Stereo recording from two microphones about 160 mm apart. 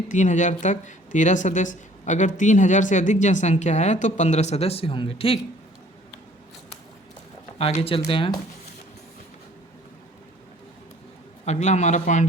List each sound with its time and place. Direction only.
0.1 s speech: 50° left (ahead or behind)
7.6 s speech: 40° left (ahead or behind)
11.4 s speech: 45° left (ahead or behind)